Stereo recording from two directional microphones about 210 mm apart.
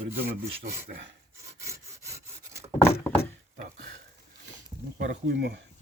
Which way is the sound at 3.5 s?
40° right (ahead or behind).